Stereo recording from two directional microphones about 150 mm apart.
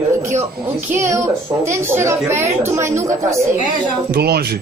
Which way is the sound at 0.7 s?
15° right (ahead or behind).